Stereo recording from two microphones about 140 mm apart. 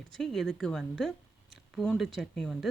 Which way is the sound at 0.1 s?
5° left (ahead or behind).